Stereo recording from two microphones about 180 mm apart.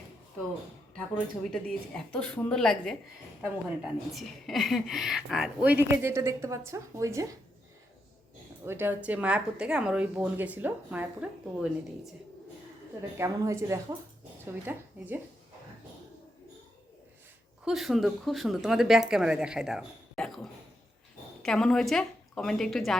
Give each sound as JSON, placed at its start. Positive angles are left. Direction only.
{"t": 1.5, "sound": "a woman's voice", "side_deg": 5}
{"t": 8.6, "sound": "speech", "side_deg": -10}
{"t": 13.1, "sound": "speech", "side_deg": -15}
{"t": 17.7, "sound": "a woman's voice", "side_deg": 0}